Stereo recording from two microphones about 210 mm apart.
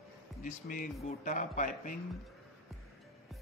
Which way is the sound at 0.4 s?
40° left (ahead or behind).